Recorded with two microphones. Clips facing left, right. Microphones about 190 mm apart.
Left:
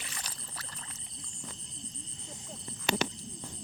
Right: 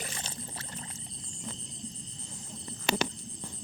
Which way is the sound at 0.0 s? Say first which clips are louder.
Right 6 dB; 30° right (ahead or behind).